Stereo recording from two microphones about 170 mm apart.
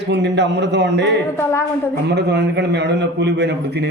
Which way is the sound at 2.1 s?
90° right.